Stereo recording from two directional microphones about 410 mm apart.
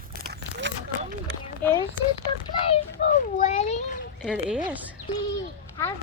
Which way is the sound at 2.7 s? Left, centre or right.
Centre.